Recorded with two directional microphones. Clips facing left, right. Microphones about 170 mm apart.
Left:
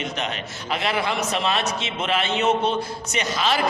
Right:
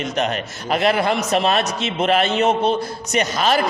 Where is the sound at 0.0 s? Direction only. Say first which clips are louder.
Right 6 dB; 45° right (ahead or behind).